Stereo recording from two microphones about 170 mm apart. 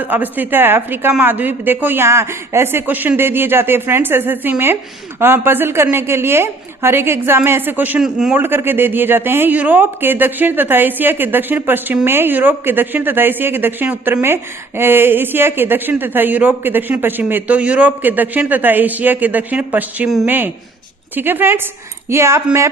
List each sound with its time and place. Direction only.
0.0 s a woman's voice: 10° right (ahead or behind)